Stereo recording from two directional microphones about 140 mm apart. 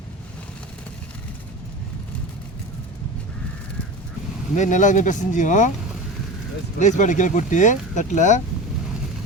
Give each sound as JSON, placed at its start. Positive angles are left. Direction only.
{"t": 4.5, "sound": "speech", "side_deg": 60}
{"t": 6.7, "sound": "speech", "side_deg": 60}